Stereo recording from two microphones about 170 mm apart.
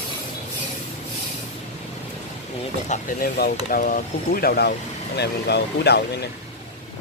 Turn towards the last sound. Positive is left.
turn(degrees=75)  # may be behind; listen again after turning